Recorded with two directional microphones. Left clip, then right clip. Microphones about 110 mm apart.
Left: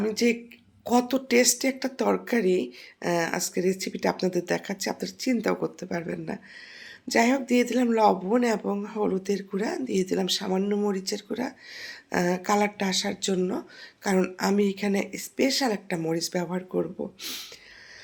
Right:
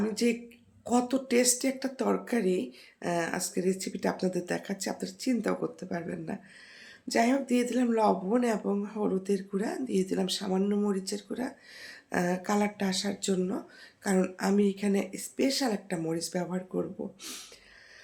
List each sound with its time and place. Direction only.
0.0 s speech: 20° left (ahead or behind)